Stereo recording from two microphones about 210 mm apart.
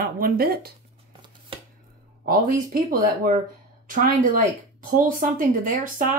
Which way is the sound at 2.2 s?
45° right (ahead or behind).